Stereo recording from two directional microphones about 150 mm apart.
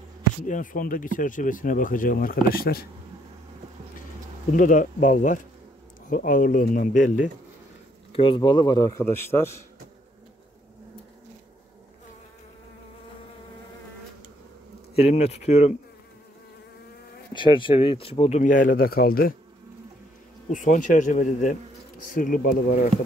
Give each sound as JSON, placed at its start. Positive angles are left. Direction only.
{"t": 0.5, "sound": "speech", "side_deg": 65}
{"t": 4.6, "sound": "speech", "side_deg": 60}
{"t": 8.1, "sound": "a man's voice", "side_deg": 35}
{"t": 15.0, "sound": "speech", "side_deg": 45}
{"t": 17.3, "sound": "speech", "side_deg": 35}
{"t": 18.4, "sound": "a man's voice", "side_deg": 65}
{"t": 20.4, "sound": "a man's voice", "side_deg": 55}